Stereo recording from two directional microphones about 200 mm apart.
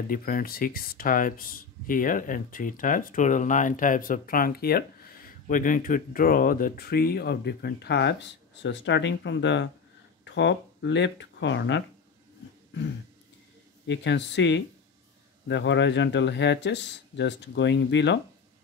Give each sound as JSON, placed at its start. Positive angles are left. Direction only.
{"t": 0.1, "sound": "speech", "side_deg": 45}
{"t": 13.8, "sound": "speech", "side_deg": 60}